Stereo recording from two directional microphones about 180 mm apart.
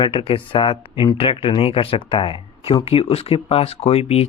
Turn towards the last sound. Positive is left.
turn(degrees=35)  # may be behind; listen again after turning